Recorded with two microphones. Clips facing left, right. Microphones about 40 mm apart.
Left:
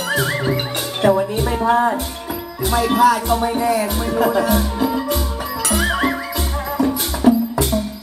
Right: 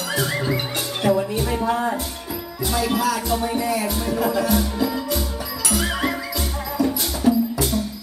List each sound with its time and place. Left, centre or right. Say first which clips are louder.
0.1 s music: left 3 dB; left
1.0 s speech: left 4 dB; left
1.6 s music: left 10 dB; left
3.4 s music: left 4 dB; centre